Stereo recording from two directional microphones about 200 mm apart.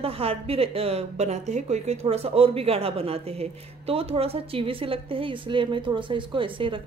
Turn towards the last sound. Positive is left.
turn(degrees=-25)  # may be behind; listen again after turning